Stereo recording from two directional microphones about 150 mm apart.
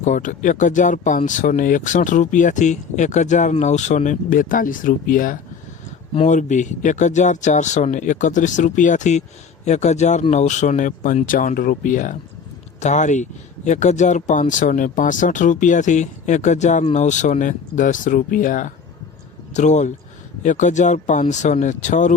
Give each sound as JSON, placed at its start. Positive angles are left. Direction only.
{"t": 0.0, "sound": "speech", "side_deg": 60}